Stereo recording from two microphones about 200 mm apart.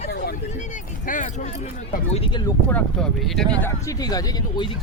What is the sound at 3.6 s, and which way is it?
Speech, 15° left (ahead or behind).